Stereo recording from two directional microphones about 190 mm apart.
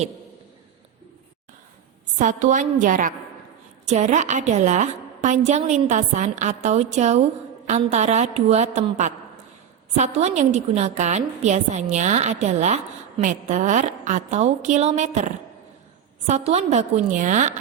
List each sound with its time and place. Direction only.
2.1 s a woman's voice: 40° right (ahead or behind)